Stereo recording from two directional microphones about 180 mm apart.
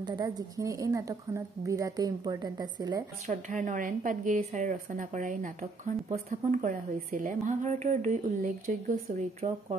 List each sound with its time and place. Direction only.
0.0 s speech: 25° right (ahead or behind)
3.3 s a woman's voice: 45° right (ahead or behind)